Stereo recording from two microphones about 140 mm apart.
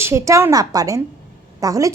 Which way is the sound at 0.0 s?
20° right (ahead or behind).